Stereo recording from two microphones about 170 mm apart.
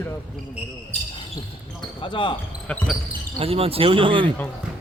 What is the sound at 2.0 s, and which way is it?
Speech, 30° left (ahead or behind).